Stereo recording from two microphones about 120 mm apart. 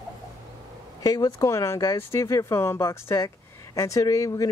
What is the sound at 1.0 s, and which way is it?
Speech, 30° left (ahead or behind).